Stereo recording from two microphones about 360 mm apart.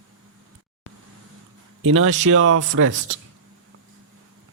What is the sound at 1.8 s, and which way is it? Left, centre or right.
Speech, right.